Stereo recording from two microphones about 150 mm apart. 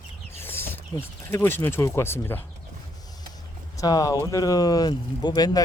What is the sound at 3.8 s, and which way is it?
Speech, 25° left (ahead or behind).